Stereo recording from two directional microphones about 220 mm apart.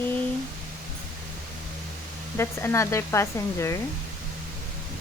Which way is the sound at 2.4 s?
10° left (ahead or behind).